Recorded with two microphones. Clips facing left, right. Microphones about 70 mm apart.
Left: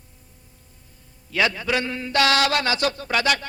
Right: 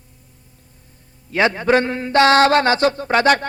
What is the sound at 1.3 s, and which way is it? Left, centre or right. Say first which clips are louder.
Mantra: right 7 dB; right.